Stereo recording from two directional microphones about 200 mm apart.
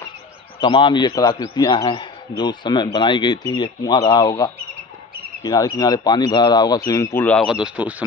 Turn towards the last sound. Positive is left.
turn(degrees=-5)  # may be behind; listen again after turning